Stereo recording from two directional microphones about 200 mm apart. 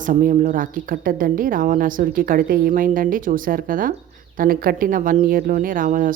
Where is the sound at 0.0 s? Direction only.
40° right (ahead or behind).